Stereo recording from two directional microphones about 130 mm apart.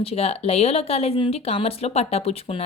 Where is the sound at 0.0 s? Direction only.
50° left (ahead or behind).